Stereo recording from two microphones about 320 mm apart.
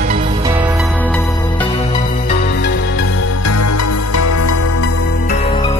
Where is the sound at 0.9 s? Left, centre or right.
Centre; by 4.8 s left.